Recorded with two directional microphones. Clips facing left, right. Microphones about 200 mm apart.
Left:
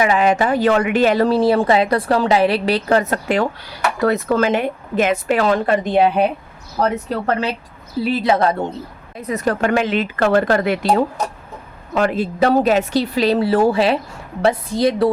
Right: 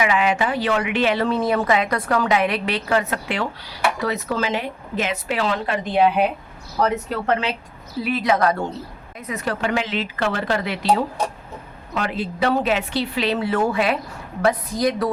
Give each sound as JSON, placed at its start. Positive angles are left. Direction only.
{"t": 0.0, "sound": "speech", "side_deg": 40}
{"t": 9.2, "sound": "a woman's voice", "side_deg": 40}